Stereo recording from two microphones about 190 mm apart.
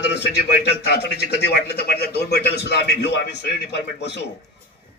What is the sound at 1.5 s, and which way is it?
A man's voice, 60° left (ahead or behind).